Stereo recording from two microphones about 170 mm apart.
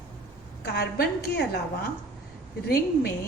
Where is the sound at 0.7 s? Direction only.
65° left (ahead or behind).